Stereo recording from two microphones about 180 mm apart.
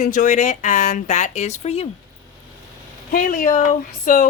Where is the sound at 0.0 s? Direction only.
45° left (ahead or behind).